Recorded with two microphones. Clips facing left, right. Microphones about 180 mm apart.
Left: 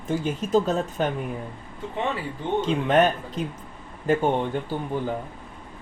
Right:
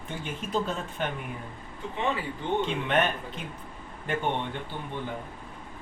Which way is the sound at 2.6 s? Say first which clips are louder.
Left 5 dB; 40° left (ahead or behind).